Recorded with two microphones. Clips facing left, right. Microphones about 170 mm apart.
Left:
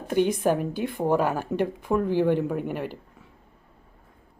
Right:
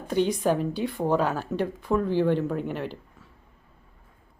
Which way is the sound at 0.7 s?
50° left (ahead or behind).